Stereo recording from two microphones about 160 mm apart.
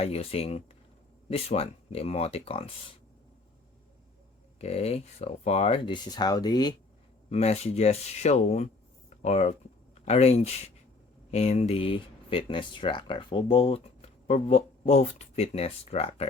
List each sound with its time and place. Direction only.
0.0 s speech: 40° left (ahead or behind)
4.6 s speech: 40° left (ahead or behind)
7.3 s speech: 40° left (ahead or behind)